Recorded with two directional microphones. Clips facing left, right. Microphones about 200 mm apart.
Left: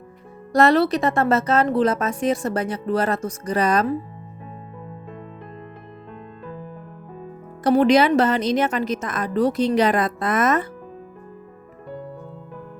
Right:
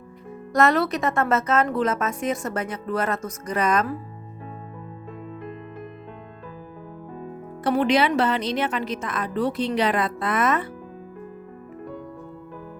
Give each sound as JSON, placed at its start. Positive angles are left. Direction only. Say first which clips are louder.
{"t": 0.5, "sound": "speech", "louder": "left 4 dB", "side_deg": 30}
{"t": 7.6, "sound": "a woman's voice", "louder": "left 5 dB", "side_deg": 40}